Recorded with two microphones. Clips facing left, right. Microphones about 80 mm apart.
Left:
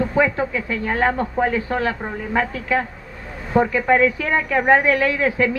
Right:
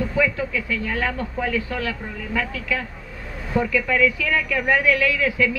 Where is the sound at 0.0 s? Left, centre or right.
Left.